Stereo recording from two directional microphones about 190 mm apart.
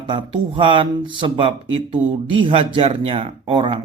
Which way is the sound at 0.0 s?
25° right (ahead or behind).